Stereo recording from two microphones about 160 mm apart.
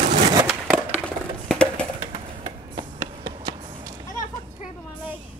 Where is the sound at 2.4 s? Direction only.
30° right (ahead or behind).